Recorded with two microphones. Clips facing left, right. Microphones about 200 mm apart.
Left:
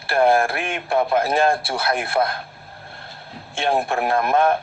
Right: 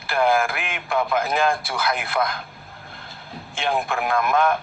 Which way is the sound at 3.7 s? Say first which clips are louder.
Left 3 dB; 35° left (ahead or behind).